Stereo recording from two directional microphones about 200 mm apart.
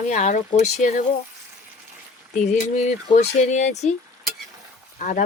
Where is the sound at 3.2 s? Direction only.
35° left (ahead or behind).